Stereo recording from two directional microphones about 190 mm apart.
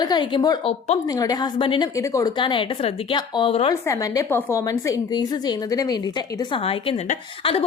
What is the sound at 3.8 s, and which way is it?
A woman's voice, 15° left (ahead or behind).